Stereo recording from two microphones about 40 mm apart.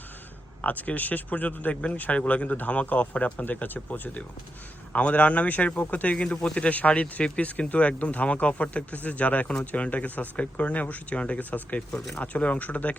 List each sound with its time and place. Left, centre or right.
0.6 s speech: left
2.1 s speech: left
4.9 s speech: left
6.2 s speech: left
6.7 s speech: left
11.3 s speech: left